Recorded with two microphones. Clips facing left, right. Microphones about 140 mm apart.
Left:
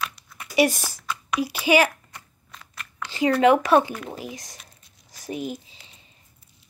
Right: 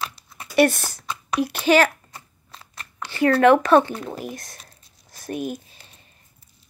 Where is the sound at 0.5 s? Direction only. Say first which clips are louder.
Right 3 dB; 10° left (ahead or behind).